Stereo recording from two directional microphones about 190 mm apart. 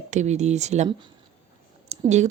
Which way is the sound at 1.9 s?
35° right (ahead or behind).